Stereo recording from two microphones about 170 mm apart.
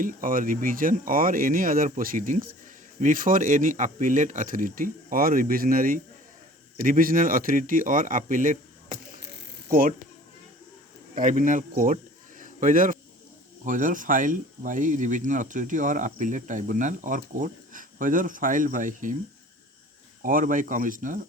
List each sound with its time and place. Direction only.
0.0 s speech: 55° right (ahead or behind)
9.2 s mechanisms: 60° right (ahead or behind)
11.1 s speech: 50° right (ahead or behind)
12.4 s a sound: 50° right (ahead or behind)
13.7 s speech: 50° right (ahead or behind)
20.2 s speech: 50° right (ahead or behind)